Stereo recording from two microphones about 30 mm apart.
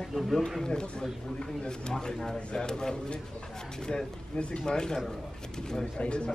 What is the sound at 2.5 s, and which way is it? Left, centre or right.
Speech, left.